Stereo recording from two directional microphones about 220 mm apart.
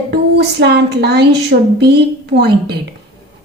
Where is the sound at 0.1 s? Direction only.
50° right (ahead or behind).